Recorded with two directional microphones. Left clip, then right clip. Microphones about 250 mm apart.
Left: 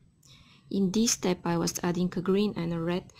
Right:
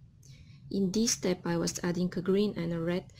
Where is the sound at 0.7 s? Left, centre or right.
Centre.